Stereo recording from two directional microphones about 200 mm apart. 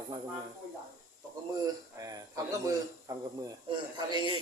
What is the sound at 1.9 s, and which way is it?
A man's voice, 15° right (ahead or behind).